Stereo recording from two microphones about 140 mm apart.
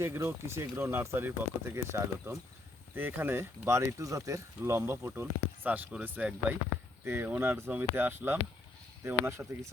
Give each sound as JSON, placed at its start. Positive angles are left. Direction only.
{"t": 0.0, "sound": "speech", "side_deg": -15}